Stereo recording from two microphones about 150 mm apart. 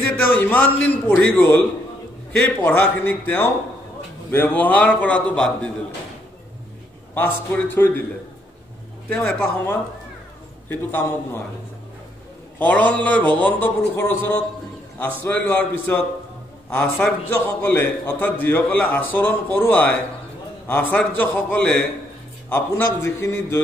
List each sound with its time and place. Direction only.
0.4 s a man's voice: 10° left (ahead or behind)
7.2 s a man's voice: 10° left (ahead or behind)
9.1 s a man's voice: 15° left (ahead or behind)
12.5 s a man's voice: 10° left (ahead or behind)
23.0 s a man's voice: 15° left (ahead or behind)